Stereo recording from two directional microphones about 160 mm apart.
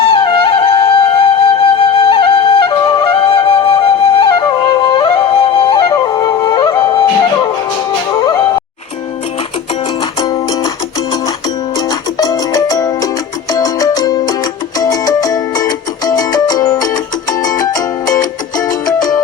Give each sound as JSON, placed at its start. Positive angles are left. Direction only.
{"t": 0.0, "sound": "music", "side_deg": 30}
{"t": 1.8, "sound": "flute", "side_deg": 30}
{"t": 8.1, "sound": "music", "side_deg": 25}
{"t": 10.2, "sound": "music", "side_deg": 25}
{"t": 11.9, "sound": "music", "side_deg": 25}